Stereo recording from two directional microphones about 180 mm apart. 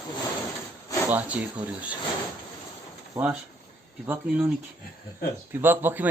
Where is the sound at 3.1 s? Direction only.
10° right (ahead or behind).